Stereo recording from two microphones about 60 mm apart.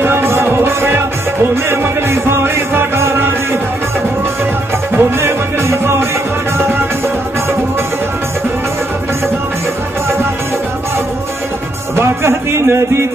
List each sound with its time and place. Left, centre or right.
0.0 s music: right
4.9 s music: right
11.9 s music: right